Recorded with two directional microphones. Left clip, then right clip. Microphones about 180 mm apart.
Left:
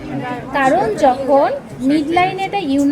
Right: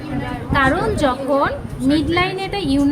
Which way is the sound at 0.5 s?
5° right (ahead or behind).